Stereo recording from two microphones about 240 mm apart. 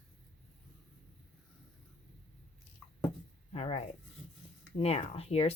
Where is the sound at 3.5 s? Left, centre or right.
Left.